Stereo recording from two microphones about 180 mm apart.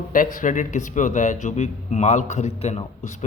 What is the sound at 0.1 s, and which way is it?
A man's voice, 50° left (ahead or behind).